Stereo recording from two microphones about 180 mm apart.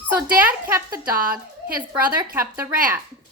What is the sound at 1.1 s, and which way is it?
Speech, 55° right (ahead or behind).